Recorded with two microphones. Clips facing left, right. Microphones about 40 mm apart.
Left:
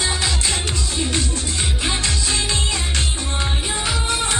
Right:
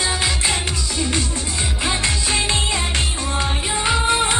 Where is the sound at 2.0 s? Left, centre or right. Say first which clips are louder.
Right 2 dB; right.